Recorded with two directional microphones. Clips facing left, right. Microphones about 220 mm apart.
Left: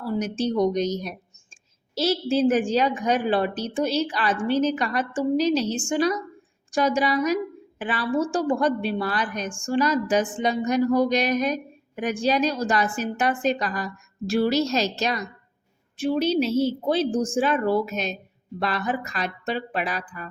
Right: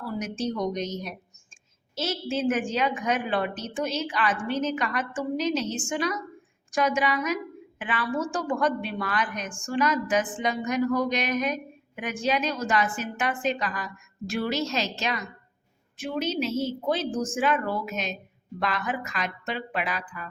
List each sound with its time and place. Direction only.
0.1 s a woman's voice: 30° left (ahead or behind)